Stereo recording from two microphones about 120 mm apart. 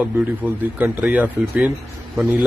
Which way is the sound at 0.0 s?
15° right (ahead or behind).